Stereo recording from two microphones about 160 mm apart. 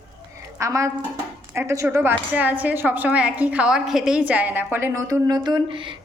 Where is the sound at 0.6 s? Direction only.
20° right (ahead or behind).